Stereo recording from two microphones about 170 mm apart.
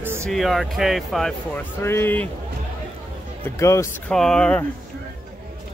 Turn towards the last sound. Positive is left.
turn(degrees=5)  # may be behind; listen again after turning